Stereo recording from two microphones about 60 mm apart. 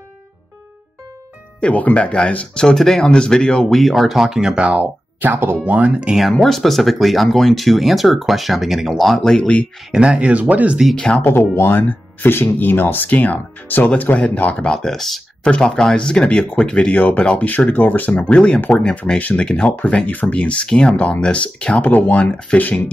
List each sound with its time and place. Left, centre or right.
1.6 s speech: left
3.8 s speech: centre
5.2 s speech: right
5.6 s speech: right
6.4 s speech: centre
9.4 s speech: left
9.8 s speech: centre
11.2 s speech: left; by 14.9 s centre
14.9 s speech: centre
15.4 s speech: centre
16.9 s speech: left
18.3 s speech: centre